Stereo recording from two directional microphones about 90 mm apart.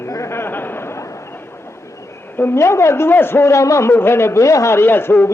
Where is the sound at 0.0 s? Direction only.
30° left (ahead or behind).